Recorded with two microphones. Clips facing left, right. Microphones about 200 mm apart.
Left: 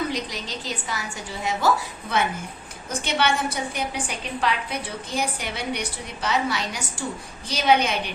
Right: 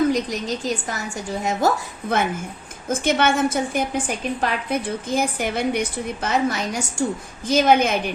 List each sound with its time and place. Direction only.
0.1 s a woman's voice: 45° right (ahead or behind)